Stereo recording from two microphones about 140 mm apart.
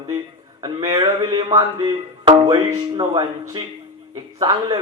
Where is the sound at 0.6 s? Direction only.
30° right (ahead or behind).